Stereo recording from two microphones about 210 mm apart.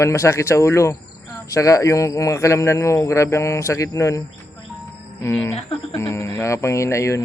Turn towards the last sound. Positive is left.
turn(degrees=15)  # may be behind; listen again after turning